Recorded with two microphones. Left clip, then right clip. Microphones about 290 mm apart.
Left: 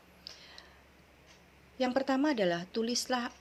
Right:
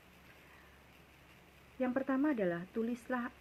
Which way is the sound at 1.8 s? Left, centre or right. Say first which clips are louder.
Left 5 dB; left.